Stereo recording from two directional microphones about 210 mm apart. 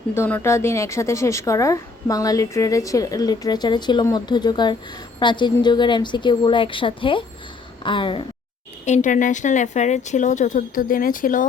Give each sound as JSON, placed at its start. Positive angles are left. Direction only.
{"t": 0.1, "sound": "a woman's voice", "side_deg": 10}
{"t": 8.8, "sound": "a woman's voice", "side_deg": 35}